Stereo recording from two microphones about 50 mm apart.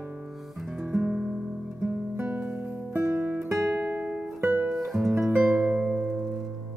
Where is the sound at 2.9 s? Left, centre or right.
Right.